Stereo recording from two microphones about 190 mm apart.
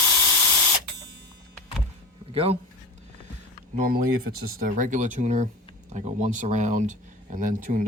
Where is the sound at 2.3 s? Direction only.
30° right (ahead or behind).